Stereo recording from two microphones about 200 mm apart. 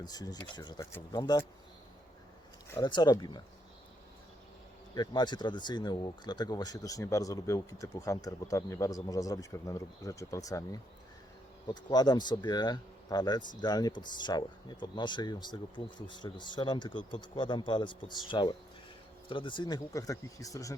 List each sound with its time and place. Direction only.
0.0 s speech: 20° left (ahead or behind)
2.6 s speech: 20° left (ahead or behind)
4.9 s speech: 20° left (ahead or behind)